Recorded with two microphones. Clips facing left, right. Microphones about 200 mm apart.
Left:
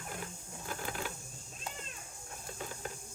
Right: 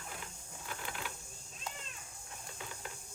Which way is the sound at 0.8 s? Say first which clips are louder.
Left 5 dB; 40° left (ahead or behind).